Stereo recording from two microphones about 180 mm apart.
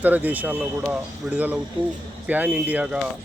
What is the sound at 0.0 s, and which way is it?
A man's voice, 10° right (ahead or behind).